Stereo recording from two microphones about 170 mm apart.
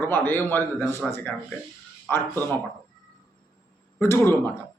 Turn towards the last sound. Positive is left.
turn(degrees=15)  # may be behind; listen again after turning